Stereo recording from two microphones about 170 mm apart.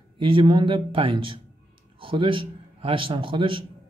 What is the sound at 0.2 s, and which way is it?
A man's voice, 30° right (ahead or behind).